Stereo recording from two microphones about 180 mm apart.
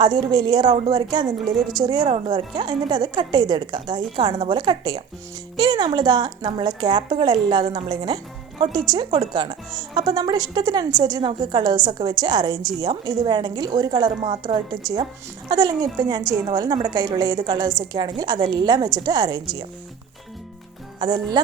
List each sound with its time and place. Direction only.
0.0 s speech: 25° right (ahead or behind)
21.0 s speech: 25° right (ahead or behind)